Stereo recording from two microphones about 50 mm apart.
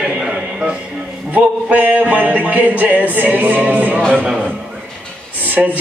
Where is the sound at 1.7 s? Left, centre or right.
Right.